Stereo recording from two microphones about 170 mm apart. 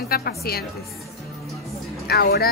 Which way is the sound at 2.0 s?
65° left (ahead or behind).